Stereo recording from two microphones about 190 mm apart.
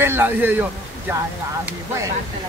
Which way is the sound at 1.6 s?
15° right (ahead or behind).